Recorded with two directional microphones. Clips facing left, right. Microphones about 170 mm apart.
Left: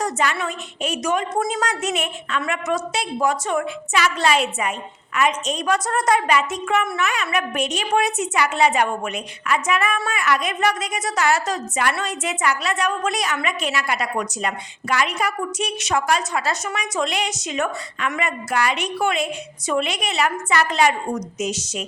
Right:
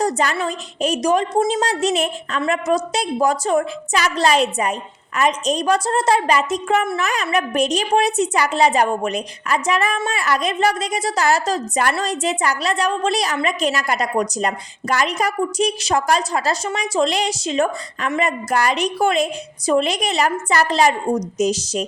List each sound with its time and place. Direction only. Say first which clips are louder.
0.0 s a woman's voice: right 3 dB; 35° right (ahead or behind)